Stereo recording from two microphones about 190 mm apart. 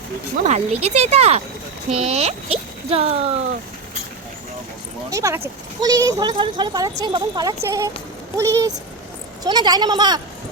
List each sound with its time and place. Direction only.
0.3 s speech: 35° right (ahead or behind)
5.1 s a child's voice: 15° right (ahead or behind)